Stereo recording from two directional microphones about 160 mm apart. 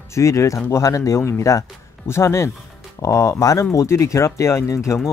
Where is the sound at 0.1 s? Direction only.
20° left (ahead or behind).